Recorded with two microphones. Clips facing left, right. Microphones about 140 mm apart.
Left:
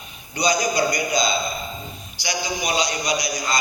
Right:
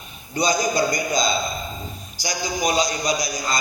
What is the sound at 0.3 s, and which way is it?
A man's voice, 50° right (ahead or behind).